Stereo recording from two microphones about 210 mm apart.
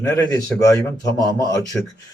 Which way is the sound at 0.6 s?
15° left (ahead or behind).